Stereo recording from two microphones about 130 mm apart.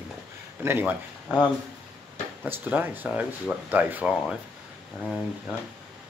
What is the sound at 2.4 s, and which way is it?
Speech, 15° right (ahead or behind).